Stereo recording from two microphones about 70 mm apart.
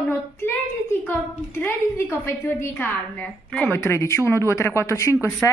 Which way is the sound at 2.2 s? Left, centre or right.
Left.